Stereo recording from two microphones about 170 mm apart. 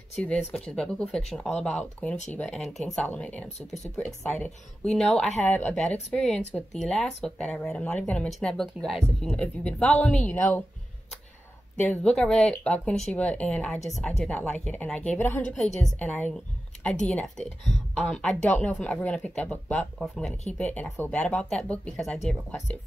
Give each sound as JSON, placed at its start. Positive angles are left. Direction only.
{"t": 0.2, "sound": "speech", "side_deg": 5}
{"t": 3.4, "sound": "speech", "side_deg": 40}
{"t": 3.9, "sound": "speech", "side_deg": 5}
{"t": 11.8, "sound": "speech", "side_deg": 10}